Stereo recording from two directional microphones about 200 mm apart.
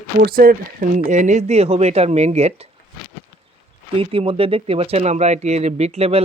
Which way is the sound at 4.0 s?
30° right (ahead or behind).